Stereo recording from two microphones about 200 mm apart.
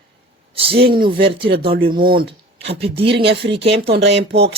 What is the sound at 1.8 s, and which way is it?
Speech, 45° right (ahead or behind).